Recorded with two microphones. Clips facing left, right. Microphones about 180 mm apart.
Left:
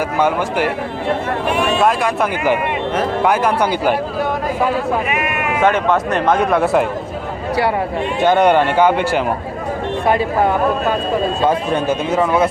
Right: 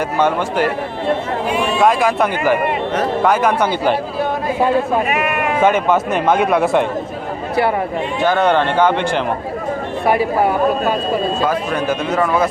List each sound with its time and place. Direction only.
0.2 s a man's voice: 10° left (ahead or behind)
1.8 s a man's voice: centre (ahead or behind)
2.4 s a man's voice: 15° left (ahead or behind)
5.6 s a man's voice: 5° right (ahead or behind)
8.2 s a man's voice: 20° left (ahead or behind)
11.4 s speech: 25° left (ahead or behind)